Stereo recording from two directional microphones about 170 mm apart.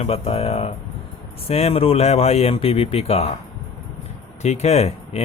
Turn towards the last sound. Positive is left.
turn(degrees=40)  # may be behind; listen again after turning